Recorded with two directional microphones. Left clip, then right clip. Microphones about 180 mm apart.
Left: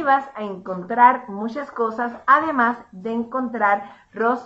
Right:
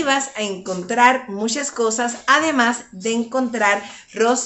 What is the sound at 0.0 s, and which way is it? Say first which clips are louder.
Speech: even; 25° right (ahead or behind).